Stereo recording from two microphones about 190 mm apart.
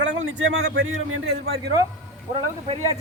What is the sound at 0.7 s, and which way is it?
Speech, 90° right.